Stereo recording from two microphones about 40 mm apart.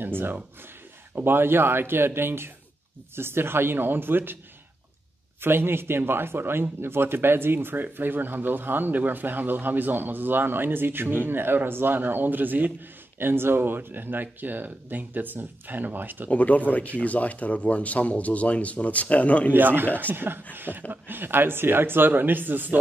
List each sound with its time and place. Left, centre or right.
0.0 s speech: right
5.4 s speech: right
13.2 s speech: right
16.3 s speech: left
19.5 s speech: right